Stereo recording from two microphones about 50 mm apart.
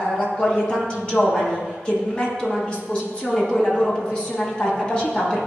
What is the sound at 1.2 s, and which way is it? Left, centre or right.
Speech, centre.